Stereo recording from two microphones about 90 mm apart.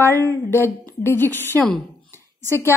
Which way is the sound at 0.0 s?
25° left (ahead or behind).